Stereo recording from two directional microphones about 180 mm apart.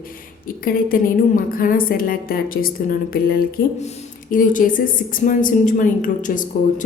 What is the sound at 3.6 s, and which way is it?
A woman's voice, 55° left (ahead or behind).